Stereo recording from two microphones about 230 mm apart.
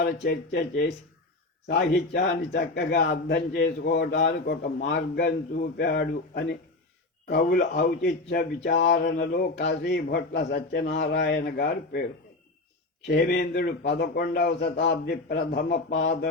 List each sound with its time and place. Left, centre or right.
0.0 s a man's voice: left
13.1 s a man's voice: left